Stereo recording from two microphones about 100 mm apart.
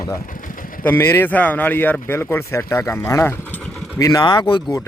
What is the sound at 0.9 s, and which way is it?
Speech, 25° left (ahead or behind).